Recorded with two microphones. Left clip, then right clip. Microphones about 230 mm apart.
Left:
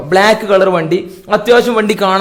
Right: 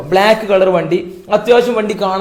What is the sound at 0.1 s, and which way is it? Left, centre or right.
A man's voice, left.